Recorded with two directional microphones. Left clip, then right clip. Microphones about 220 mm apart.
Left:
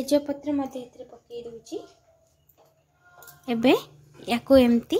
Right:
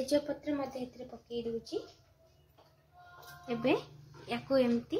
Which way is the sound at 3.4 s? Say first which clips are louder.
Left 10 dB; 50° left (ahead or behind).